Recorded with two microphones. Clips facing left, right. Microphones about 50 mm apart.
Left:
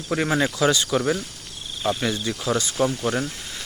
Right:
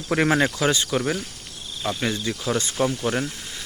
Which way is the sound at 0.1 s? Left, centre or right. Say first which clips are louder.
Right 3 dB; right.